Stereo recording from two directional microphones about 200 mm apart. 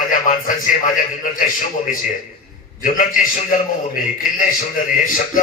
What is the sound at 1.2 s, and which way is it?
A man's voice, 40° left (ahead or behind).